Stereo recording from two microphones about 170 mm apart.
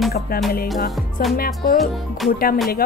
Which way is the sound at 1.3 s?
60° left (ahead or behind).